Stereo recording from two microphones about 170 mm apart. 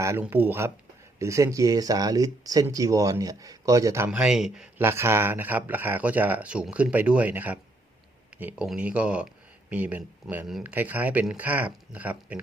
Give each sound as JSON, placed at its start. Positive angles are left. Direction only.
{"t": 0.0, "sound": "speech", "side_deg": -15}